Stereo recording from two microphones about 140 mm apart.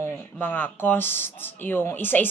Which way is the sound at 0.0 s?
15° left (ahead or behind).